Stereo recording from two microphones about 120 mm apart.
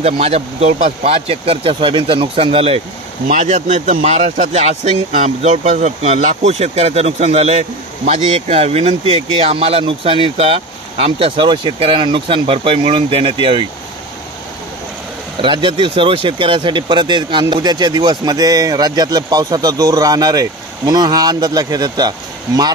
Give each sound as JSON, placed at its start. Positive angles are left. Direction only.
{"t": 0.0, "sound": "speech", "side_deg": -60}
{"t": 3.3, "sound": "speech", "side_deg": -90}
{"t": 15.4, "sound": "speech", "side_deg": -45}